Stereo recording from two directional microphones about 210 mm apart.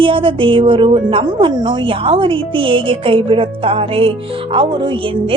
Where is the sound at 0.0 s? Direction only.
25° right (ahead or behind).